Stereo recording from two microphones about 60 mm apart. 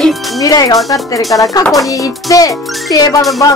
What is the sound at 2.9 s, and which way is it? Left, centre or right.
Speech, left.